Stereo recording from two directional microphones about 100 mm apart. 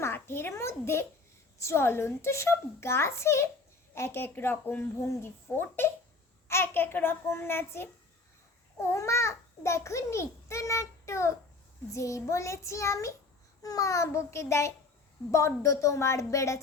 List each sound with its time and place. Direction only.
0.0 s a child's voice: 25° left (ahead or behind)